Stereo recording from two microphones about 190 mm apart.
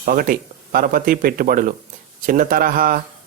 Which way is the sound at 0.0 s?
45° right (ahead or behind).